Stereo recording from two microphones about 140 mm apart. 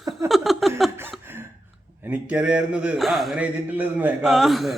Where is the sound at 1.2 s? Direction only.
15° right (ahead or behind).